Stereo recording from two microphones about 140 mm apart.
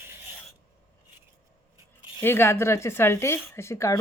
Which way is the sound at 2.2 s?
15° left (ahead or behind).